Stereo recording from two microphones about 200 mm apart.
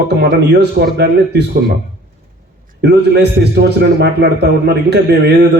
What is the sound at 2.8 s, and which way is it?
A man's voice, 55° right (ahead or behind).